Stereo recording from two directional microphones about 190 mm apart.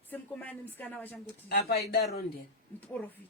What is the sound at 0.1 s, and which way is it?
Speech, 10° left (ahead or behind).